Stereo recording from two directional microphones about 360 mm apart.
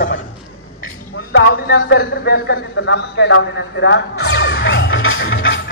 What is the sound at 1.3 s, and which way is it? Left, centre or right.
A man's voice, left.